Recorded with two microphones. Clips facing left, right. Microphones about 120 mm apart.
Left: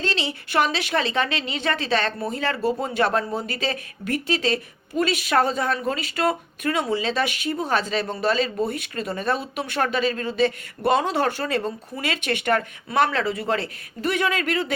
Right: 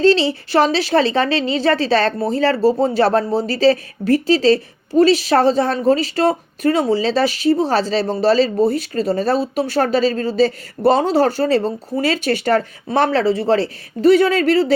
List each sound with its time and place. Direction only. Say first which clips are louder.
0.0 s a woman's voice: right 13 dB; 35° right (ahead or behind)